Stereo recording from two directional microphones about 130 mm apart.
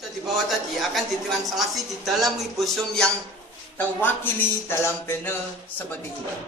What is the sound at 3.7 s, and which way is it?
Speech, 15° left (ahead or behind).